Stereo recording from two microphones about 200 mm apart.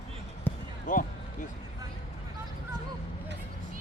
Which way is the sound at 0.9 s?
40° left (ahead or behind).